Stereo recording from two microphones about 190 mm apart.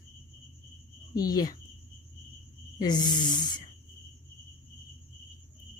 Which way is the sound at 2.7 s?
20° left (ahead or behind).